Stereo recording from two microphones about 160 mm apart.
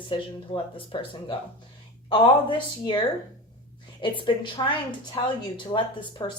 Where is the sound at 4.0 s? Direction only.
30° left (ahead or behind).